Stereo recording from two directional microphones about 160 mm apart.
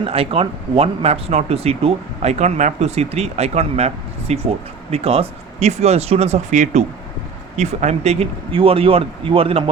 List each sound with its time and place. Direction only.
0.0 s speech: 35° right (ahead or behind)